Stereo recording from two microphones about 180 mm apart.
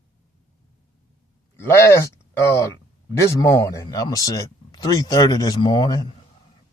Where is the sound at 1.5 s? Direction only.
15° left (ahead or behind).